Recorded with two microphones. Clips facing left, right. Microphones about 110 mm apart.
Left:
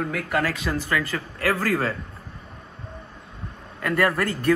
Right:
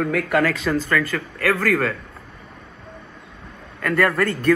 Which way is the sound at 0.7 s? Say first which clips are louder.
Right 4 dB; 15° left (ahead or behind).